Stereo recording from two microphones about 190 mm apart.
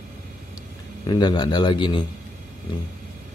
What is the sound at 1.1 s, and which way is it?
Speech, 20° left (ahead or behind).